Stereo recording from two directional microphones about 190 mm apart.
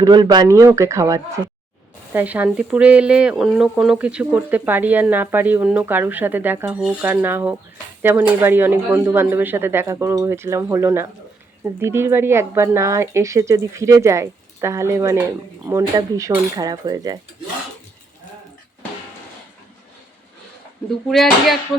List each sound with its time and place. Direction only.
0.0 s speech: 20° right (ahead or behind)
21.1 s speech: centre (ahead or behind)